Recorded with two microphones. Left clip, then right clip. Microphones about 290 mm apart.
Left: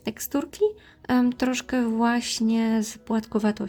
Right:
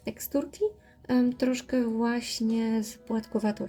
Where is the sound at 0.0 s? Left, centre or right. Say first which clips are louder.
Left 2 dB; left.